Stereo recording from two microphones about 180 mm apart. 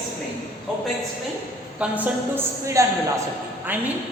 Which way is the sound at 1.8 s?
5° right (ahead or behind).